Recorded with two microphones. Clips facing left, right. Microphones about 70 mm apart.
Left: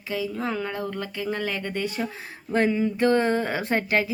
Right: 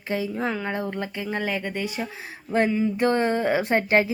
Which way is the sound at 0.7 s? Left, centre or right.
Right.